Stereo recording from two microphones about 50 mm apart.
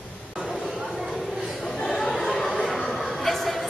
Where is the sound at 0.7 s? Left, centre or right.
Centre.